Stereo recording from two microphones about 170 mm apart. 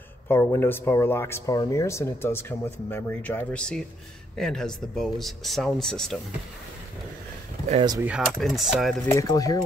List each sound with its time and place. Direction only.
0.3 s speech: 15° left (ahead or behind)
8.0 s mechanisms: 5° right (ahead or behind)
8.3 s speech: centre (ahead or behind)
9.1 s speech: 20° left (ahead or behind)